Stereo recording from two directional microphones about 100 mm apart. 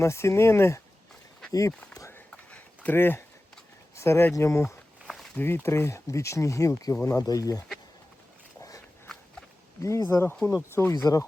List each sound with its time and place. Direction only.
0.0 s speech: 30° left (ahead or behind)
2.0 s a sound: 25° left (ahead or behind)
2.3 s a sound: 15° left (ahead or behind)
3.9 s speech: 25° left (ahead or behind)
5.0 s walk: 5° left (ahead or behind)
5.4 s speech: 20° left (ahead or behind); by 7.6 s 35° left (ahead or behind)
9.1 s walk: 5° left (ahead or behind)
9.8 s speech: 30° left (ahead or behind)